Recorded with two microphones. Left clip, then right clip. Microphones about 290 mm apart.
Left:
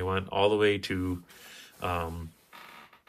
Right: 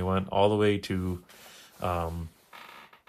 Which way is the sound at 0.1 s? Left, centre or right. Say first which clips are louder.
Right 1 dB; centre.